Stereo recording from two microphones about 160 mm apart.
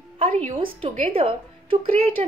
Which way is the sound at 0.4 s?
40° right (ahead or behind).